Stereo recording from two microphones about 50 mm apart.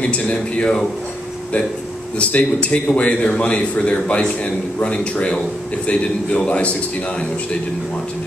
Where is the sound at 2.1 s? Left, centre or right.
Left.